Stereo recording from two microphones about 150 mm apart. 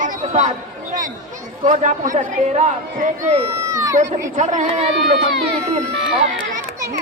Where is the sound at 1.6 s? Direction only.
55° right (ahead or behind).